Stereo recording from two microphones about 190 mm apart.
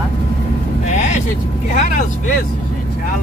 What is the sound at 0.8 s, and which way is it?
Vehicle, 40° left (ahead or behind).